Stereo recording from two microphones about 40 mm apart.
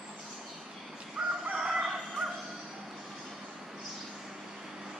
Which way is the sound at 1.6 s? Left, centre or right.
Centre.